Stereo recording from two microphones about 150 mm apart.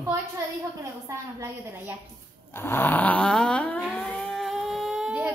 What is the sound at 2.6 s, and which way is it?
Snoring, 15° left (ahead or behind).